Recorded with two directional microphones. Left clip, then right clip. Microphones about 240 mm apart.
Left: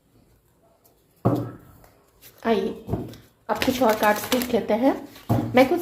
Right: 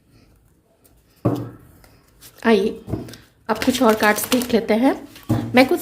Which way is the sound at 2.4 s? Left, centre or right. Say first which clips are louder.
Right 6 dB; right.